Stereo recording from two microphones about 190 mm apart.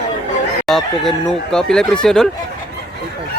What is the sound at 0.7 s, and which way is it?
Speech, centre (ahead or behind).